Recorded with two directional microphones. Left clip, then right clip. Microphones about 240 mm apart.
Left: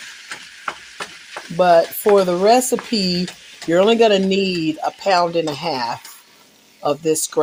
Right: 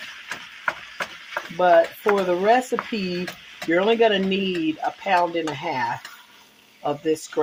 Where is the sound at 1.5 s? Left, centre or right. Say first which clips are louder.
Left 3 dB; left.